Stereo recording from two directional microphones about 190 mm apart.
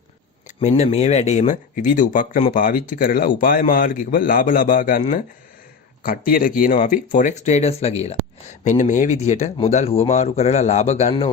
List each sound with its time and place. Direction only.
0.6 s speech: 35° left (ahead or behind)